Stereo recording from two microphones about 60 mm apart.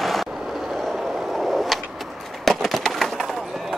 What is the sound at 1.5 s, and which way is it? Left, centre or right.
Vehicle, centre.